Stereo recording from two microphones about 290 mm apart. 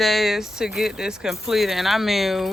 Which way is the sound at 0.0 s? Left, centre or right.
Centre.